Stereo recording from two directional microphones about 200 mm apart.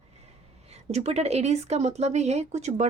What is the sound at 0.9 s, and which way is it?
Speech, 30° right (ahead or behind).